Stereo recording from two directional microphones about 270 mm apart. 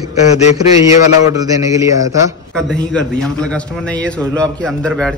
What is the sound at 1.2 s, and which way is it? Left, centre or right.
A man's voice, centre.